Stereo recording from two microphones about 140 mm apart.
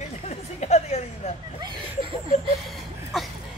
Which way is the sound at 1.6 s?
35° right (ahead or behind).